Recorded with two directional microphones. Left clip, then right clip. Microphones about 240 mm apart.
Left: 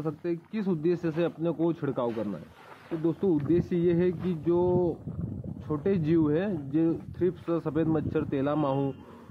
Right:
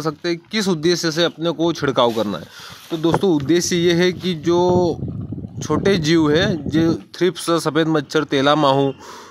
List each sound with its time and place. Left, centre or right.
0.0 s speech: right